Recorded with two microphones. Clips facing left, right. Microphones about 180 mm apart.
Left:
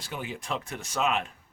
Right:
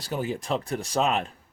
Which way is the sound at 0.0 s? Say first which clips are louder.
Right 7 dB; 40° right (ahead or behind).